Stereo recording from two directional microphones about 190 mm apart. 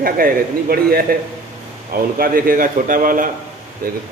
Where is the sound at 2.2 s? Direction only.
50° right (ahead or behind).